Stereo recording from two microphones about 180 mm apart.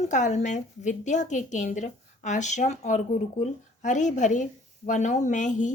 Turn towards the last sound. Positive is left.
turn(degrees=45)  # may be behind; listen again after turning